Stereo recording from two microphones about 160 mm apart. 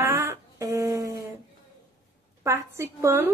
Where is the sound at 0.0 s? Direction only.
20° right (ahead or behind).